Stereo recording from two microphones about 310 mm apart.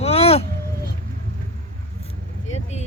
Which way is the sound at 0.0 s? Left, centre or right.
Centre.